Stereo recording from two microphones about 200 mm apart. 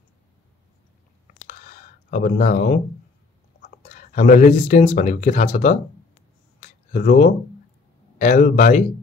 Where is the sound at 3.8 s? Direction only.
40° left (ahead or behind).